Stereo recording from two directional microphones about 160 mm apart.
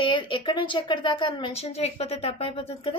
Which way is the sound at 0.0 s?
30° left (ahead or behind).